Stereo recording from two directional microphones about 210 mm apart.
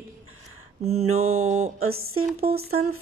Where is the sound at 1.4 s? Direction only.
35° right (ahead or behind).